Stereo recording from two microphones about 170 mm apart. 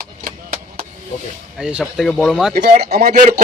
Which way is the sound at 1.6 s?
5° right (ahead or behind).